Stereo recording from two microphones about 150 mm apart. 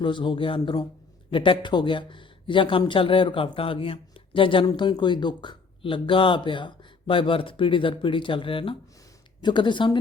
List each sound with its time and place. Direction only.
0.0 s speech: 35° left (ahead or behind)